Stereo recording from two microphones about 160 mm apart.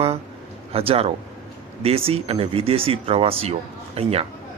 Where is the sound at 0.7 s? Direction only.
40° right (ahead or behind).